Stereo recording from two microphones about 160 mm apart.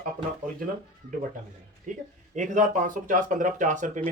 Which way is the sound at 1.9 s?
50° right (ahead or behind).